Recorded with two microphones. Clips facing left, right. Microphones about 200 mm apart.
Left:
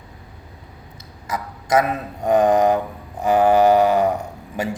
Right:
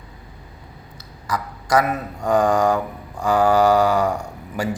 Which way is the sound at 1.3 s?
20° left (ahead or behind).